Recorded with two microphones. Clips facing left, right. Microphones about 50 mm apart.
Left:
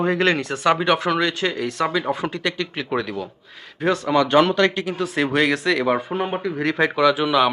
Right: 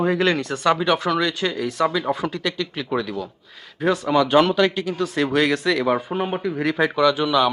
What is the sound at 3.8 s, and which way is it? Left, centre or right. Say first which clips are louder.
Speech: even; centre.